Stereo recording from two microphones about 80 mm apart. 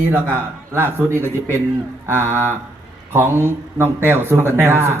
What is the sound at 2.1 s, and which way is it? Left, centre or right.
A man's voice, right.